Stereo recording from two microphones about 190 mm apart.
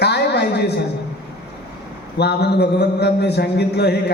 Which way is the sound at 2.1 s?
60° left (ahead or behind).